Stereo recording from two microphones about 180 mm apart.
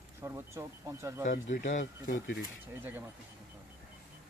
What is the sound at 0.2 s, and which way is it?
Speech, 15° right (ahead or behind).